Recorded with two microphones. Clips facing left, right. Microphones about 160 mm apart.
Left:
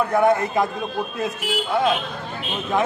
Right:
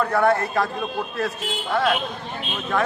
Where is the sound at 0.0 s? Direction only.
15° left (ahead or behind).